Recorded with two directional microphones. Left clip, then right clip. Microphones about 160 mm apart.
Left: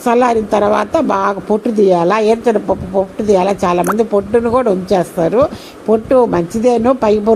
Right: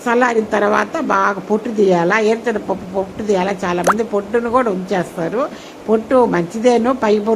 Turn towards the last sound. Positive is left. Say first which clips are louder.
# left 4 dB
turn(degrees=25)  # may be behind; listen again after turning